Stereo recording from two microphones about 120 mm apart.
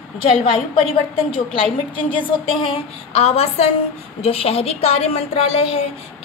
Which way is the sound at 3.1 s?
55° left (ahead or behind).